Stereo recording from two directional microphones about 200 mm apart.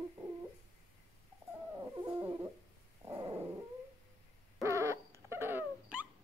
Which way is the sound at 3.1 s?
15° right (ahead or behind).